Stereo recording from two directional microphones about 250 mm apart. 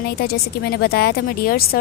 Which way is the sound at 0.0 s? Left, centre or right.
Left.